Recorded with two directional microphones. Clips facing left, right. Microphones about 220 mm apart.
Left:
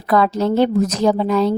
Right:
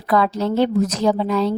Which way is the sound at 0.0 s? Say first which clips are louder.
Left 2 dB; 45° left (ahead or behind).